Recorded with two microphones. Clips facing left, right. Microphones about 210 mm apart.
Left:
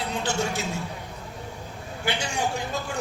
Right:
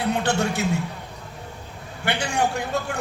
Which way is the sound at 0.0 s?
60° right (ahead or behind).